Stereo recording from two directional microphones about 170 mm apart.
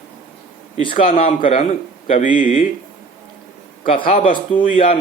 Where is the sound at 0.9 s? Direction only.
40° left (ahead or behind).